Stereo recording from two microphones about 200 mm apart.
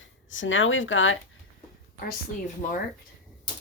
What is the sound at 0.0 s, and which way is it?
Speech, 70° left (ahead or behind).